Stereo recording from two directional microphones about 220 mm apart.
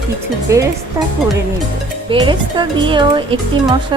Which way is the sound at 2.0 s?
20° right (ahead or behind).